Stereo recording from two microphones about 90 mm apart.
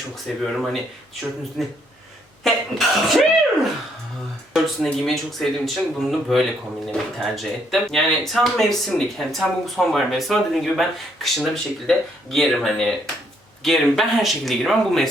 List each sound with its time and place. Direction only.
0.5 s speech: 5° right (ahead or behind)